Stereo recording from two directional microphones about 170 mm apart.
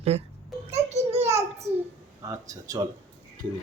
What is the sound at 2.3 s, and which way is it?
Speech, 20° right (ahead or behind).